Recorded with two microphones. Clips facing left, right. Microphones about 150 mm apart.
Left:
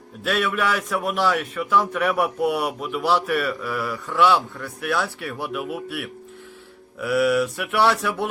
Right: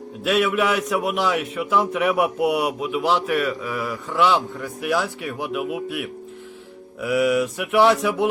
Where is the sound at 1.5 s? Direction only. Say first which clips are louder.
Right 1 dB; 20° right (ahead or behind).